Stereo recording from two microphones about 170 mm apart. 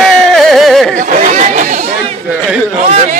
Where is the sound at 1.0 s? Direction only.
50° right (ahead or behind).